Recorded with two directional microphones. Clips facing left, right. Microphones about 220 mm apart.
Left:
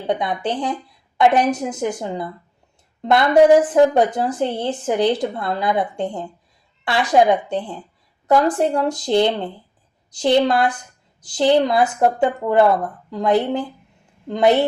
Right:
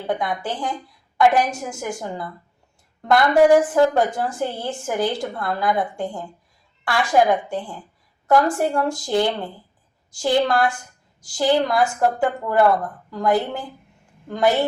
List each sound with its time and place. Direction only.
0.1 s a woman's voice: 20° left (ahead or behind)